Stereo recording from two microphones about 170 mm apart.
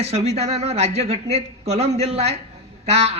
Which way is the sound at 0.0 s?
40° right (ahead or behind).